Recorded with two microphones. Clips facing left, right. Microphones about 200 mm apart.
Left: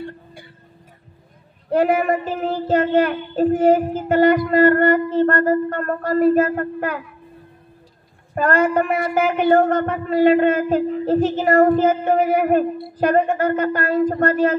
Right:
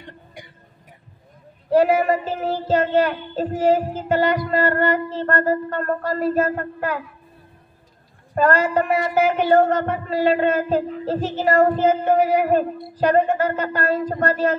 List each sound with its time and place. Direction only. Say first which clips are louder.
0.0 s music: left 7 dB; 15° right (ahead or behind)
1.7 s child singing: right 1 dB; 55° left (ahead or behind)
8.4 s child singing: left 1 dB; 55° left (ahead or behind)